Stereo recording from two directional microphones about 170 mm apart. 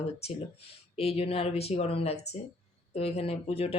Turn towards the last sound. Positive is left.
turn(degrees=35)  # may be behind; listen again after turning